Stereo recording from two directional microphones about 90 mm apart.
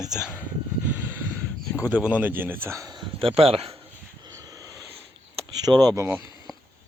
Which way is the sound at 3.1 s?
90° right.